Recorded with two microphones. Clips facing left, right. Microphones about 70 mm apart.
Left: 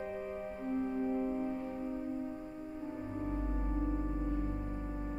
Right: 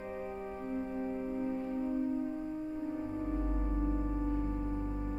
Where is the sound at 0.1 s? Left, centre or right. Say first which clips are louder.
Even; centre.